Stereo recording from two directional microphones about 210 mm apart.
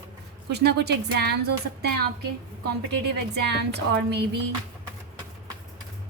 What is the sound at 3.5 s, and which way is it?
Speech, 50° right (ahead or behind).